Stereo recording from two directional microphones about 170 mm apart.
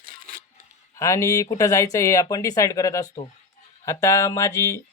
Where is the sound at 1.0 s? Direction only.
20° left (ahead or behind).